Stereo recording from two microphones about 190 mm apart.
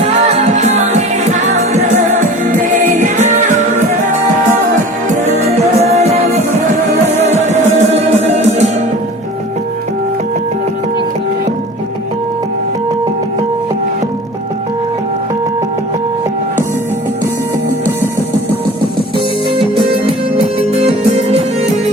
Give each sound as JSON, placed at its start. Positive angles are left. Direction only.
{"t": 0.3, "sound": "music", "side_deg": -35}
{"t": 2.4, "sound": "music", "side_deg": -45}
{"t": 5.3, "sound": "music", "side_deg": -35}
{"t": 7.2, "sound": "music", "side_deg": -35}
{"t": 19.5, "sound": "music", "side_deg": -30}